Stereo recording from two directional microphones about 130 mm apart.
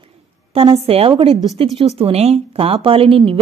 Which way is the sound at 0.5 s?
45° right (ahead or behind).